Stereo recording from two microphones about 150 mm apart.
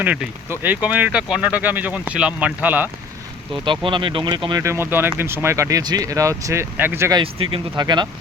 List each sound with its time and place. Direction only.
0.0 s speech: 10° right (ahead or behind)
3.6 s speech: 30° right (ahead or behind)
4.4 s speech: 20° right (ahead or behind)
7.1 s speech: 35° right (ahead or behind)